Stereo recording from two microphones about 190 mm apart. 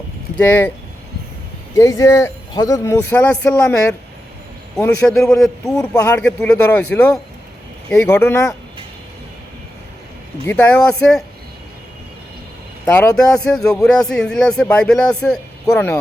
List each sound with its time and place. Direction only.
0.3 s speech: 10° left (ahead or behind)
1.7 s speech: 15° left (ahead or behind)
5.0 s a man's voice: 5° left (ahead or behind)
5.8 s speech: 20° left (ahead or behind)
6.1 s speech: 5° left (ahead or behind)
10.4 s speech: 10° left (ahead or behind)
12.8 s a man's voice: 10° left (ahead or behind)